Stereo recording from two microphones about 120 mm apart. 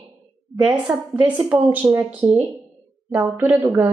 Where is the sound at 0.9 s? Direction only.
10° right (ahead or behind).